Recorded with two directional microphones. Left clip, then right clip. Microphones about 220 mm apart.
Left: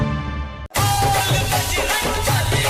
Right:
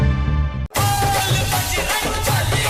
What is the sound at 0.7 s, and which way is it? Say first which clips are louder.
Music: left 1 dB; centre (ahead or behind).